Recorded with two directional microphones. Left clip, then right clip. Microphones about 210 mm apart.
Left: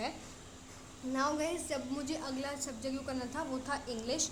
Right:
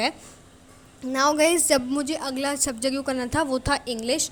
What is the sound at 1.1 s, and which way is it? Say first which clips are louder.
Speech: right 14 dB; 40° right (ahead or behind).